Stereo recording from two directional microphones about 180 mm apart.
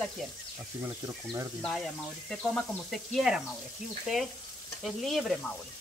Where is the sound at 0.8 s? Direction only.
15° right (ahead or behind).